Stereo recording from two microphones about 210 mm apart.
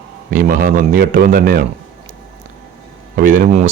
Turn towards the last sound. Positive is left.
turn(degrees=-35)  # may be behind; listen again after turning